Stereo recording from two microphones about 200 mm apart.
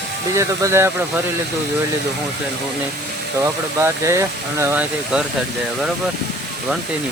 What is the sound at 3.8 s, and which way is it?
Speech, 15° right (ahead or behind).